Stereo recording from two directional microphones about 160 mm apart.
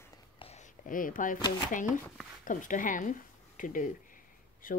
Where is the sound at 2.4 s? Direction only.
55° left (ahead or behind).